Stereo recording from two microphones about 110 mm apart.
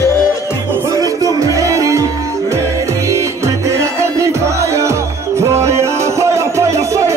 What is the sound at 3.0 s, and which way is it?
Music, 30° right (ahead or behind).